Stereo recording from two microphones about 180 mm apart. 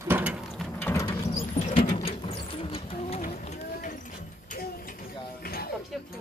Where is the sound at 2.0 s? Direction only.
30° left (ahead or behind).